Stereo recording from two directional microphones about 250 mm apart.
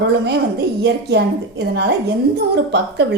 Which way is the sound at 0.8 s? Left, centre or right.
Right.